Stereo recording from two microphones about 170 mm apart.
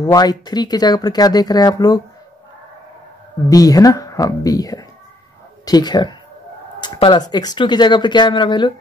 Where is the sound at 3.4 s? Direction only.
20° left (ahead or behind).